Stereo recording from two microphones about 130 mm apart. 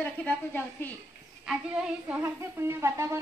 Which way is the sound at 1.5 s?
5° right (ahead or behind).